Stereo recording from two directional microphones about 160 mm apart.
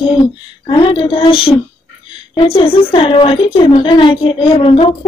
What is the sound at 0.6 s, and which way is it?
Speech, 35° left (ahead or behind).